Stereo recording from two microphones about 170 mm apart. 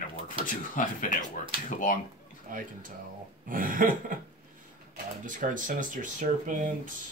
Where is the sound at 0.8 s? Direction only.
50° left (ahead or behind).